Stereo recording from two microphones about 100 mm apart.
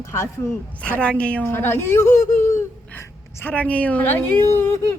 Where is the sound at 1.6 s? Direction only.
25° left (ahead or behind).